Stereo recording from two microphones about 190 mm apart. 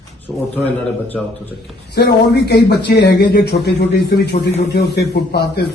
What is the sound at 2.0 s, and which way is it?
A man's voice, 60° left (ahead or behind).